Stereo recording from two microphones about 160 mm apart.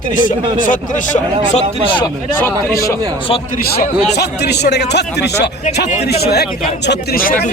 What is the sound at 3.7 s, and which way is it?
Speech, 85° left.